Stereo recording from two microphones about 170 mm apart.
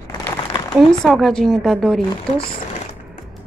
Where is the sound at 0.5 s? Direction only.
30° left (ahead or behind).